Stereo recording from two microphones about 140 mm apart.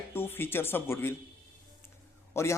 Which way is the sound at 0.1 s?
15° left (ahead or behind).